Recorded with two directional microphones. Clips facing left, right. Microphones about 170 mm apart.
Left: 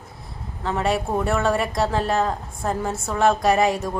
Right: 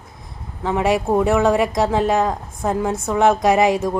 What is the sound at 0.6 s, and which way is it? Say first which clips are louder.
A woman's voice: right 4 dB; 15° right (ahead or behind).